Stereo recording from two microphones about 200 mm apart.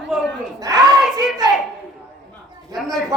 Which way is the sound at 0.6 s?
20° right (ahead or behind).